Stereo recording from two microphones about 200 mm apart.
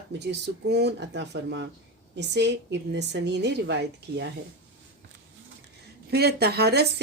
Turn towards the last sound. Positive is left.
turn(degrees=-55)  # may be behind; listen again after turning